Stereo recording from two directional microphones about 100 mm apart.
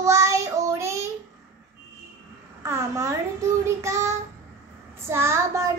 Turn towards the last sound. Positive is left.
turn(degrees=-30)  # may be behind; listen again after turning